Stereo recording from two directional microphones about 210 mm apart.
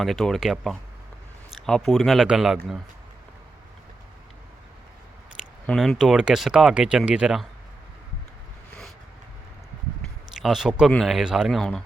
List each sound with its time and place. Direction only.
0.0 s speech: centre (ahead or behind)
5.6 s speech: centre (ahead or behind)
10.3 s speech: centre (ahead or behind)